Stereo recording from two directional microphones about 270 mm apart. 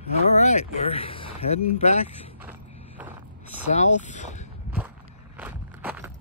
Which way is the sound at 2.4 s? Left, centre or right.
Centre.